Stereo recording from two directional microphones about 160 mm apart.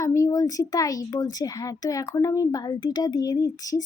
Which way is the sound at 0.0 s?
20° left (ahead or behind).